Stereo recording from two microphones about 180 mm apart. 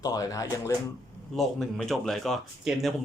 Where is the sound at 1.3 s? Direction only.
5° left (ahead or behind).